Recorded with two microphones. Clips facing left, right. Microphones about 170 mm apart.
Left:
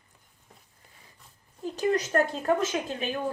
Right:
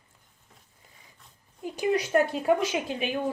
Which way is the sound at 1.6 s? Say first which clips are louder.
Even; 10° right (ahead or behind).